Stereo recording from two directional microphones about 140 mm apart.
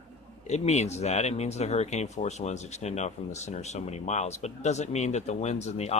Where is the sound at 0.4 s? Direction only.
55° left (ahead or behind).